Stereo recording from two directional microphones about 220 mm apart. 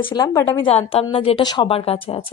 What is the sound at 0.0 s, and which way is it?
A woman's voice, 20° left (ahead or behind).